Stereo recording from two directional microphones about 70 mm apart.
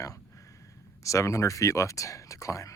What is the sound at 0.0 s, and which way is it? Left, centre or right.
Speech, left.